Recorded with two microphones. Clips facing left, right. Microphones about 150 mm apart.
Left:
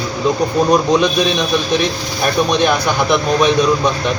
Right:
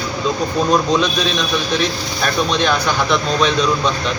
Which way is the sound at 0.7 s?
15° left (ahead or behind).